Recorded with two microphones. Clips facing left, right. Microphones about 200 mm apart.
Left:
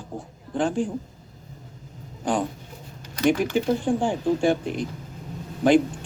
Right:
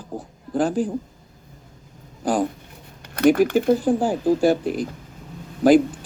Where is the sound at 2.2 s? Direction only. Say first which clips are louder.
Right 3 dB; 5° right (ahead or behind).